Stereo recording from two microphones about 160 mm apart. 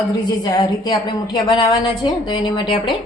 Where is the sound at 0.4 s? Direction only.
25° left (ahead or behind).